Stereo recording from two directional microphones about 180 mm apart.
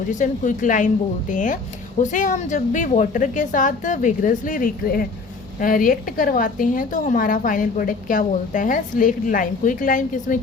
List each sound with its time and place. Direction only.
0.1 s a woman's voice: 45° left (ahead or behind)